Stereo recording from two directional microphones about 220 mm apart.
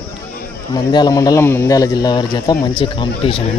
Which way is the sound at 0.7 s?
20° left (ahead or behind).